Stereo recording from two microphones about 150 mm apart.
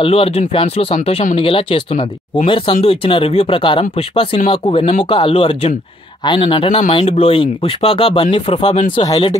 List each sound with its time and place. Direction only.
0.0 s speech: 40° left (ahead or behind)